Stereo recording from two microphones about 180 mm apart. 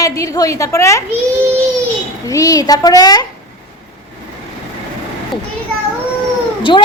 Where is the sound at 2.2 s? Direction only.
20° left (ahead or behind).